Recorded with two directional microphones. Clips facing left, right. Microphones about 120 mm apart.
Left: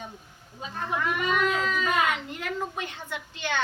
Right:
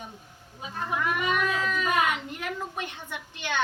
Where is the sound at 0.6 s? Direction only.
10° right (ahead or behind).